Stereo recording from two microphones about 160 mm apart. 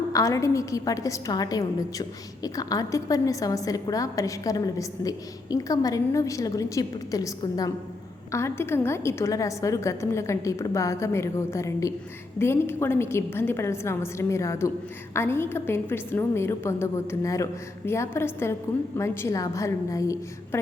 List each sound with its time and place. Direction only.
0.1 s a woman's voice: 20° left (ahead or behind)